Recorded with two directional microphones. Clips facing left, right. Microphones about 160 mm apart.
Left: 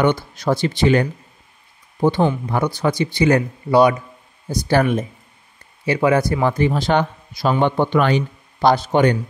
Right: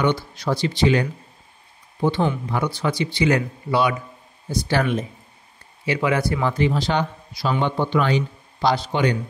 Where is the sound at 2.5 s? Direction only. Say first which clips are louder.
Left 4 dB; 45° left (ahead or behind).